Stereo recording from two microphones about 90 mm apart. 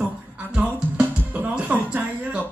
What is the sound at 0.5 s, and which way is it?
A man's voice, 15° right (ahead or behind).